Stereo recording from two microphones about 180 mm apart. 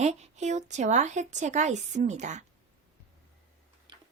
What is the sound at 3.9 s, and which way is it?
Tick-tock, 25° right (ahead or behind).